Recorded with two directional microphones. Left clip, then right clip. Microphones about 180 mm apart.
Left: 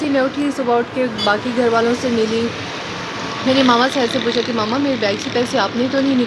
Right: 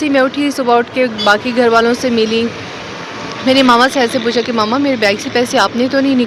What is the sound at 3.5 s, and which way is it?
A woman's voice, 15° right (ahead or behind).